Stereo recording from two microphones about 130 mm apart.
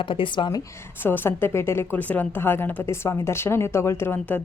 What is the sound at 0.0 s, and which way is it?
Speech, 40° left (ahead or behind).